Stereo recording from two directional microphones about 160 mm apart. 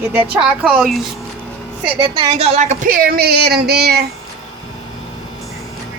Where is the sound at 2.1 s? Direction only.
40° right (ahead or behind); by 4.0 s 90° right.